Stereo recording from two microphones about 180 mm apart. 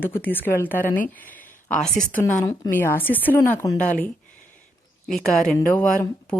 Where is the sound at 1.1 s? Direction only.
10° left (ahead or behind).